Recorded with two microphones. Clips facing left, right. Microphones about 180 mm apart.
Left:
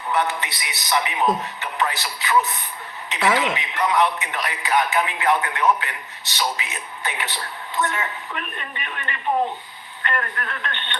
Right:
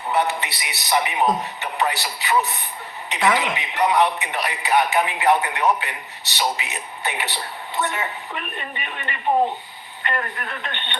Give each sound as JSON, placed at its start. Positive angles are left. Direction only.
{"t": 0.1, "sound": "a man's voice", "side_deg": -20}